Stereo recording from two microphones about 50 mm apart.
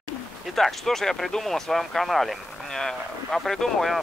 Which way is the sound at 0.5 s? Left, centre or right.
Centre.